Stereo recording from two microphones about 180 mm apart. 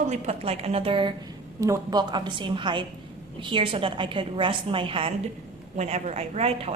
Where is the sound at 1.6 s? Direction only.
20° right (ahead or behind).